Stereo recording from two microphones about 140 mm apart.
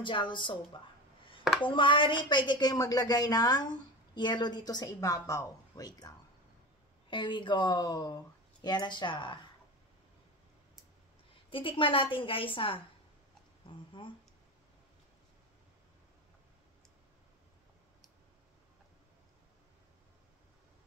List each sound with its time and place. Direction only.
0.0 s speech: 35° left (ahead or behind)
1.6 s a woman's voice: 35° left (ahead or behind)
11.5 s speech: 40° left (ahead or behind)